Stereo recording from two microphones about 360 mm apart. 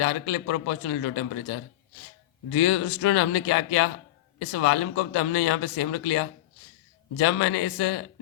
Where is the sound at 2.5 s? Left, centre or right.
Left.